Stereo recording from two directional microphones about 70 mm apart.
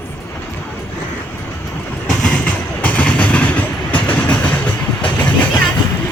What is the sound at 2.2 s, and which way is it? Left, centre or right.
Train, centre.